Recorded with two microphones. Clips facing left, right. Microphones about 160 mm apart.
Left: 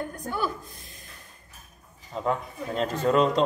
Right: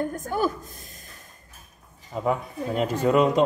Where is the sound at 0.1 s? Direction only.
45° right (ahead or behind).